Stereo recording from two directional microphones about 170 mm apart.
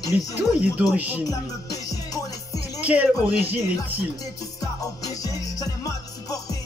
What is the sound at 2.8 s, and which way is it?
Speech, 10° right (ahead or behind).